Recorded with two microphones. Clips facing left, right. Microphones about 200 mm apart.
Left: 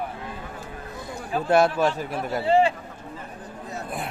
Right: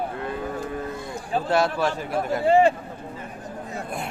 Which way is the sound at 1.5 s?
20° left (ahead or behind).